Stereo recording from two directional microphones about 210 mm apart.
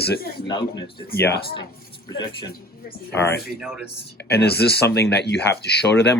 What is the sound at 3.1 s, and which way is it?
Speech, 10° left (ahead or behind).